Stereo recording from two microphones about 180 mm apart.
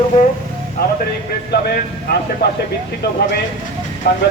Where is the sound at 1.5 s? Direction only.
60° left (ahead or behind).